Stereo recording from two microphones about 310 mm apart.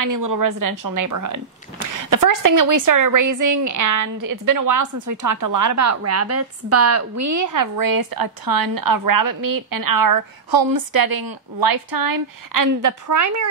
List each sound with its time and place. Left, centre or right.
0.0 s speech: right